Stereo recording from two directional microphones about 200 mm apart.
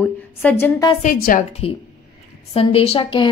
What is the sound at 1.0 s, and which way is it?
Speech, 45° left (ahead or behind).